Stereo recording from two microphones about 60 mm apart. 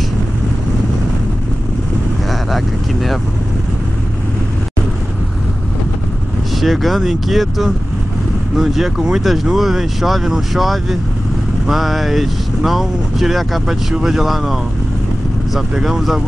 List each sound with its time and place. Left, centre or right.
2.5 s vehicle: centre
6.6 s speech: centre
15.8 s speech: centre